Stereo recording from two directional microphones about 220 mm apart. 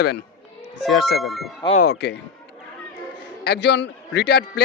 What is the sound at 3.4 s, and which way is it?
Speech, 50° left (ahead or behind).